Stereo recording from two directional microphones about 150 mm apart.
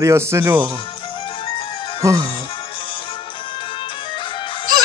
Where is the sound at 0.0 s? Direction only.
20° right (ahead or behind).